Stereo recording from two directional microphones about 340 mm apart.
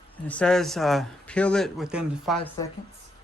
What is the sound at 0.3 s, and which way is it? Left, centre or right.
Speech, centre.